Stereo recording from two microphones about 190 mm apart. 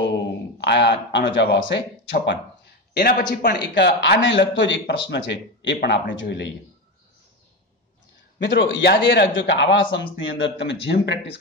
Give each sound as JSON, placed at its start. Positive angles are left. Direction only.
{"t": 0.6, "sound": "speech", "side_deg": 65}
{"t": 3.7, "sound": "speech", "side_deg": 65}
{"t": 8.5, "sound": "speech", "side_deg": 75}